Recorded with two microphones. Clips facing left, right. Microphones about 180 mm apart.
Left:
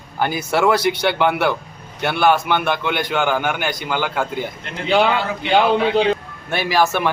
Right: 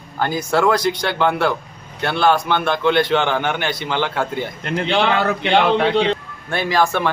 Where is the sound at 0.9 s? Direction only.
15° left (ahead or behind).